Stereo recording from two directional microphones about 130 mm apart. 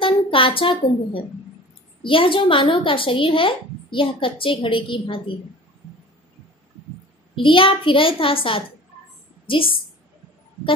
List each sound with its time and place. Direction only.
0.0 s a woman's voice: 45° left (ahead or behind)
7.3 s a child's voice: 40° left (ahead or behind)